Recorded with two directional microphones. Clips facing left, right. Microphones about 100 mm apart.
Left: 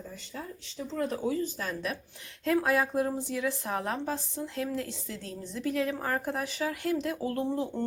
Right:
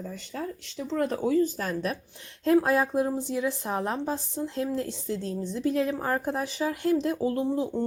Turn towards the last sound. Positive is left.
turn(degrees=-15)  # may be behind; listen again after turning